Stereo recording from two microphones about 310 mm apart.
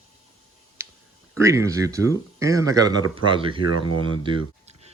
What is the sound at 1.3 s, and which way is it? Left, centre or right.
Speech, centre.